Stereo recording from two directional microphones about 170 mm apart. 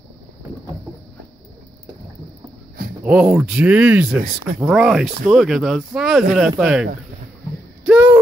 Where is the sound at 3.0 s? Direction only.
5° right (ahead or behind).